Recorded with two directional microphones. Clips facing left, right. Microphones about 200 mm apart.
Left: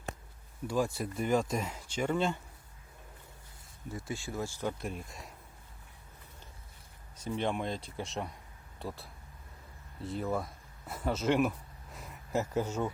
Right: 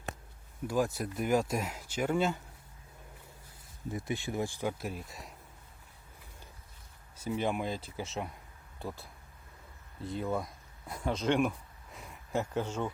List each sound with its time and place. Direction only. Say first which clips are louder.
0.9 s speech: even; 5° right (ahead or behind)
3.9 s speech: right 3 dB; 20° right (ahead or behind)
4.8 s speech: even; 5° right (ahead or behind)
7.2 s speech: right 1 dB; 5° right (ahead or behind)